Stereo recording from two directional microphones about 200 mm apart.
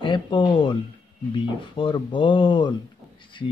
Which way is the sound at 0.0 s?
25° left (ahead or behind).